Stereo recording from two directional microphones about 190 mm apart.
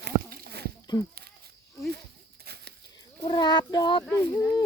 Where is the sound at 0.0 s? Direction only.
55° right (ahead or behind).